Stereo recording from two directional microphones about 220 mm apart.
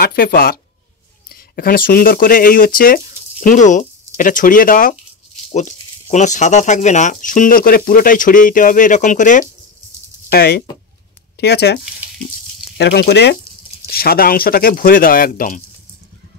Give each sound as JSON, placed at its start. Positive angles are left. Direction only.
{"t": 0.0, "sound": "speech", "side_deg": 45}
{"t": 10.3, "sound": "speech", "side_deg": 45}